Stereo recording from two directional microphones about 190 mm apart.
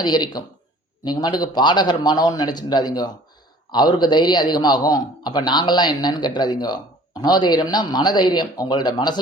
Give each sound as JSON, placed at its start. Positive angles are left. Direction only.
{"t": 0.0, "sound": "a man's voice", "side_deg": 20}